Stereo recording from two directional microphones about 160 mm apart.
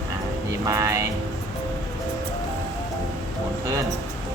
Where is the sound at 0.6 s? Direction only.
20° right (ahead or behind).